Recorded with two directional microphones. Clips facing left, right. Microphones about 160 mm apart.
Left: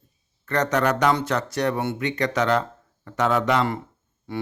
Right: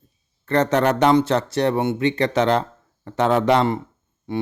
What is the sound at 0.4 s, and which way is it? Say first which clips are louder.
Speech: right 4 dB; 30° right (ahead or behind).